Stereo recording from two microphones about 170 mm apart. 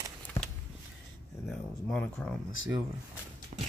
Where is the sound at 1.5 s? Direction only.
5° left (ahead or behind).